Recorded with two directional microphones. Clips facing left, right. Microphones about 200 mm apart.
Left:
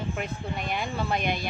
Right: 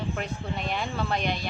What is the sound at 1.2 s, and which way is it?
Speech, 50° left (ahead or behind).